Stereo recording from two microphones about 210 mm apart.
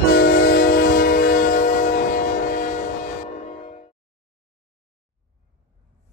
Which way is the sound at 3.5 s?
30° left (ahead or behind).